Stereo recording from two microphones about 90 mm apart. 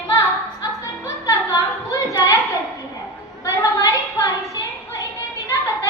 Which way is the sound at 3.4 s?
40° left (ahead or behind).